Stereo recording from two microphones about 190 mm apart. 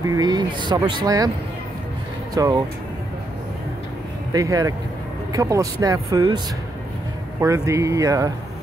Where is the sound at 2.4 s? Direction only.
20° right (ahead or behind).